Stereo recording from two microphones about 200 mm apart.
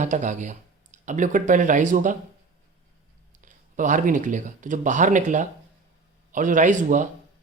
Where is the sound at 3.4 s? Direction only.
40° right (ahead or behind).